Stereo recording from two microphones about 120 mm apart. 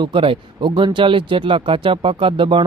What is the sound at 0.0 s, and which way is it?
Speech, 45° right (ahead or behind).